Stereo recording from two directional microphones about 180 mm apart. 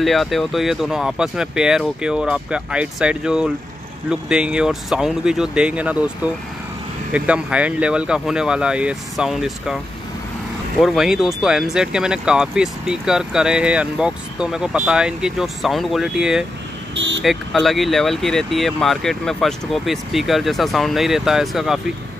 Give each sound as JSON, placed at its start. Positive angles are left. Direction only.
{"t": 0.0, "sound": "speech", "side_deg": 0}
{"t": 10.8, "sound": "speech", "side_deg": 0}
{"t": 16.9, "sound": "vehicle", "side_deg": -85}
{"t": 17.2, "sound": "speech", "side_deg": 0}